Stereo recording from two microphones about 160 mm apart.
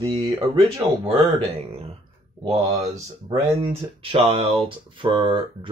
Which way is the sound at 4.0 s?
35° right (ahead or behind).